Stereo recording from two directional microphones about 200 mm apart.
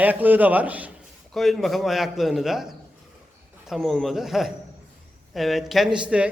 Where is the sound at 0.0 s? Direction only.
10° right (ahead or behind).